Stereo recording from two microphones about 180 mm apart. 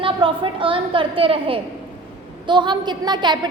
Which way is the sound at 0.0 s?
30° right (ahead or behind).